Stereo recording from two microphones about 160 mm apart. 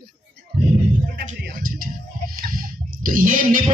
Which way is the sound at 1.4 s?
60° right (ahead or behind).